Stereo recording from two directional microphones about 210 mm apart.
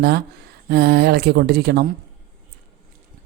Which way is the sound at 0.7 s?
50° right (ahead or behind).